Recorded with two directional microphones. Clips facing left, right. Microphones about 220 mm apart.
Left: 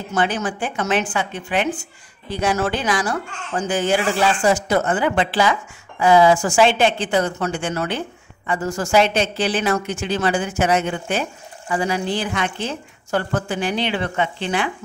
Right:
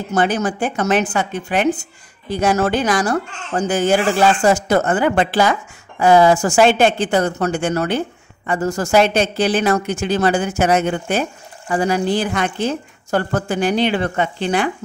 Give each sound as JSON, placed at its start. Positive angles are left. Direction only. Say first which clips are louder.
{"t": 0.1, "sound": "speech", "louder": "right 4 dB", "side_deg": -40}